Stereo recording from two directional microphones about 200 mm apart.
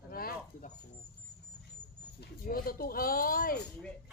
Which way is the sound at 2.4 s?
45° left (ahead or behind).